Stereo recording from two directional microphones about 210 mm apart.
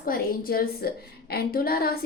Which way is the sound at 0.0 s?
45° left (ahead or behind).